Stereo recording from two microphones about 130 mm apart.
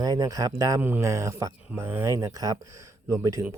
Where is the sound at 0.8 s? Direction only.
15° right (ahead or behind).